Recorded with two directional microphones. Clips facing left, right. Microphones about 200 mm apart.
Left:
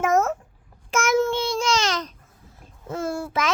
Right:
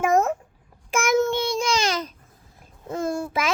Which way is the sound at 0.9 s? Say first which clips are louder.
Even; 15° right (ahead or behind).